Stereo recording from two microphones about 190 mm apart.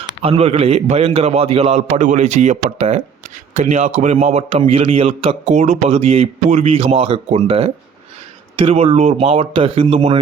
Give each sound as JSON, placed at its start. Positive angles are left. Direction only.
{"t": 0.1, "sound": "a man's voice", "side_deg": -30}